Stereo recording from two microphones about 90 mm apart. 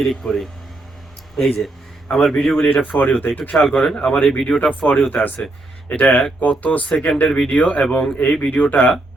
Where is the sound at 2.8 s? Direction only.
15° left (ahead or behind).